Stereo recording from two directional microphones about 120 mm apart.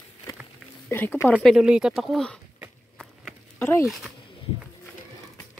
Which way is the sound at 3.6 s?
20° left (ahead or behind).